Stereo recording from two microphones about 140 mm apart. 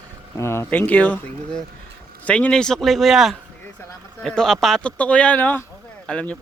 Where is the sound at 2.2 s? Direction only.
10° left (ahead or behind).